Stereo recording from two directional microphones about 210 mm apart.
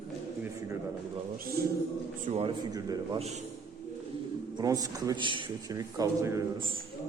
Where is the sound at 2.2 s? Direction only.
30° right (ahead or behind).